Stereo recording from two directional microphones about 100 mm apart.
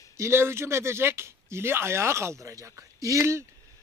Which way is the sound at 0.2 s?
25° right (ahead or behind).